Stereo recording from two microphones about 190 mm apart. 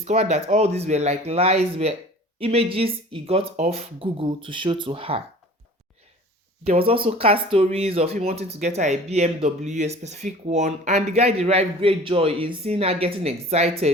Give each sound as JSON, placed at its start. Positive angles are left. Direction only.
{"t": 0.0, "sound": "speech", "side_deg": -35}
{"t": 6.7, "sound": "speech", "side_deg": -30}